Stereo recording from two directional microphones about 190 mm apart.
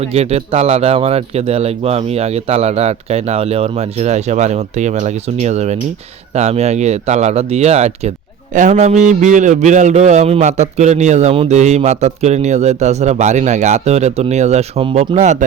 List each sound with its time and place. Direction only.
0.0 s a man's voice: 35° right (ahead or behind)